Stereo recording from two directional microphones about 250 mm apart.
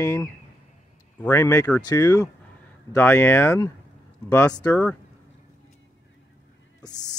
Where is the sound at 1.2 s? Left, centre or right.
Centre.